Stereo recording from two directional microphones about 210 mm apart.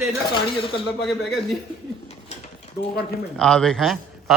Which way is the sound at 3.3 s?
5° left (ahead or behind).